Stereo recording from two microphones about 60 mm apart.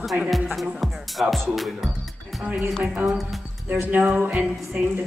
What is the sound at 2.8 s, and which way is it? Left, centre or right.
Music, right.